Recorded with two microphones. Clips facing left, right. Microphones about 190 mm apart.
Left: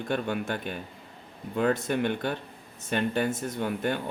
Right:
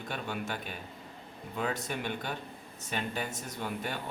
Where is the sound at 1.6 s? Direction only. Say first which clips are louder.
Left 9 dB; 55° left (ahead or behind).